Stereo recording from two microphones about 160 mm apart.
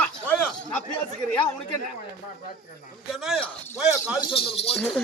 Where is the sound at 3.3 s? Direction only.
Centre (ahead or behind).